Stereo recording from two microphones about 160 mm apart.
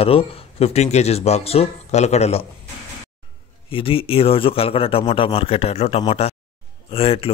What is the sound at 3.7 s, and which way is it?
A man's voice, 35° left (ahead or behind).